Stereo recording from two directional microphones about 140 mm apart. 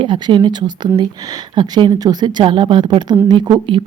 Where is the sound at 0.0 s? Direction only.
35° right (ahead or behind).